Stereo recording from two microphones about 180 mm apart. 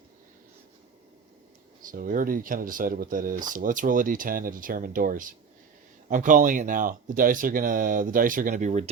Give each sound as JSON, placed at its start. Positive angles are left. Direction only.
{"t": 1.8, "sound": "speech", "side_deg": -50}